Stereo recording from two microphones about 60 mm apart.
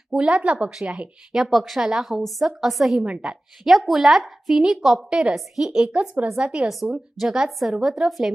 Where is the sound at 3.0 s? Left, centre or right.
Centre.